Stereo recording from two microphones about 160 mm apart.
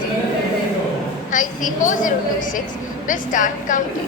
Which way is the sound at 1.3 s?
55° left (ahead or behind).